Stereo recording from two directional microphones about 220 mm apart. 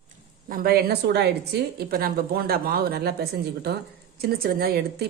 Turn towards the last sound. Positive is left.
turn(degrees=-45)  # may be behind; listen again after turning